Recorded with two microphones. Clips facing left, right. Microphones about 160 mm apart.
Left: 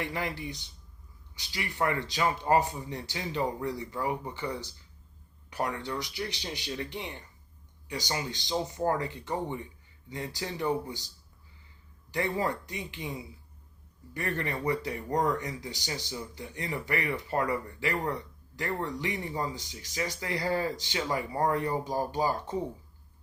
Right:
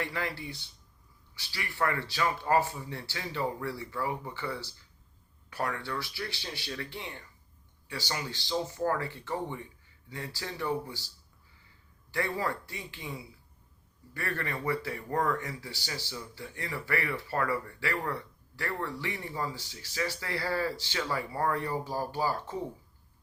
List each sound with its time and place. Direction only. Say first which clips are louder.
0.0 s speech: left 1 dB; 20° left (ahead or behind)
12.1 s speech: left 2 dB; 20° left (ahead or behind)